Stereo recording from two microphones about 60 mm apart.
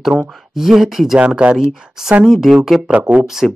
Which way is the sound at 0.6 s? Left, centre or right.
Centre.